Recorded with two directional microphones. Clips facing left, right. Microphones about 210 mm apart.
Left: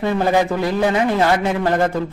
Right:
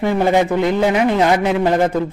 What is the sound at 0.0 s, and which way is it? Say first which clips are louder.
Speech: right 2 dB; 20° right (ahead or behind).